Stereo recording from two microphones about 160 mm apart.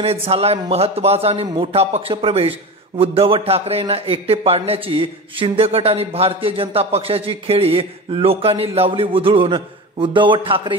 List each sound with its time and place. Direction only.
0.0 s a man's voice: 40° right (ahead or behind)